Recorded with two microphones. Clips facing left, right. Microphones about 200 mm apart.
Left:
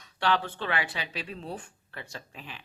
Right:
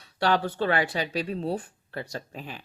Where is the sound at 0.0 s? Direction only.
40° right (ahead or behind).